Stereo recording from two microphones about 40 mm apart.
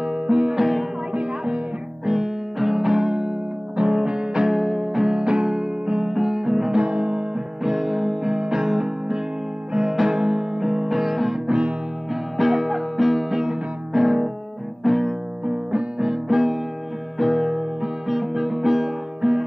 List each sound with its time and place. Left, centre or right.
0.0 s music: right
0.6 s music: centre
1.1 s music: right
2.0 s music: centre
3.1 s music: centre
4.5 s music: centre
4.8 s music: centre
6.8 s guitar: right
7.6 s music: centre
11.4 s music: right
12.1 s music: centre
14.8 s music: centre
15.4 s music: centre